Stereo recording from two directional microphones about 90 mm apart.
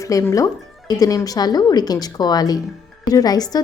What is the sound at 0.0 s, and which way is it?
Speech, 40° left (ahead or behind).